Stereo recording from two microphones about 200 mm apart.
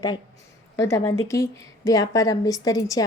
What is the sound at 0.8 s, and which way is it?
A woman's voice, 15° left (ahead or behind).